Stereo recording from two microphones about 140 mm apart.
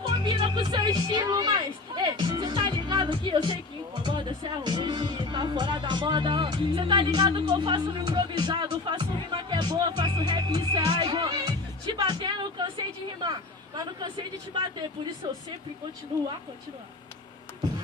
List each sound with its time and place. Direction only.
0.2 s speech: 35° right (ahead or behind)